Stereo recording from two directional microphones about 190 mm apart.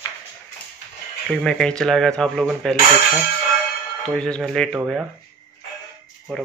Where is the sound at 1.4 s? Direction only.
5° left (ahead or behind).